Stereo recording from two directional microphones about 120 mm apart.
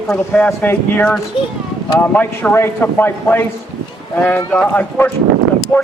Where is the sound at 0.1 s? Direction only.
10° left (ahead or behind).